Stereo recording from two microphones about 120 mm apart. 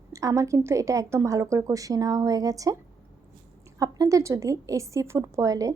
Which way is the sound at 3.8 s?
30° right (ahead or behind).